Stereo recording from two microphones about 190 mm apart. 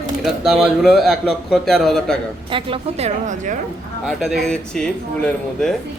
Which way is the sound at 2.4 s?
25° right (ahead or behind).